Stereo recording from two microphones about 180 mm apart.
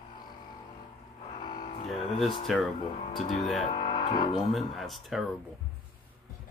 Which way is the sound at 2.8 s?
30° left (ahead or behind).